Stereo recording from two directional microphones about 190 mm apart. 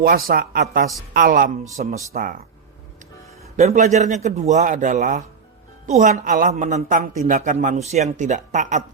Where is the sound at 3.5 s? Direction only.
40° right (ahead or behind).